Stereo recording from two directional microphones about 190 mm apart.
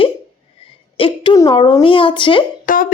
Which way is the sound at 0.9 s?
25° left (ahead or behind).